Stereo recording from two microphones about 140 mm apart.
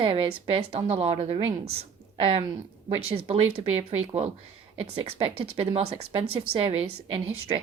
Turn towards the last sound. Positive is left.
turn(degrees=-40)  # may be behind; listen again after turning